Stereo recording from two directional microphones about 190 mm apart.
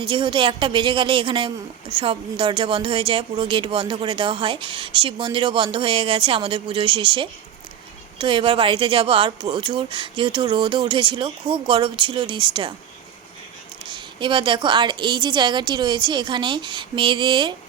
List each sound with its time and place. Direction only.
0.0 s a woman's voice: 25° right (ahead or behind)
13.8 s a woman's voice: 25° right (ahead or behind)